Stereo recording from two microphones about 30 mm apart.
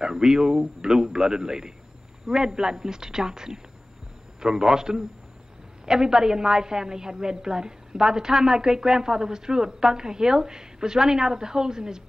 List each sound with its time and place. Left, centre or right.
0.0 s a woman's voice: right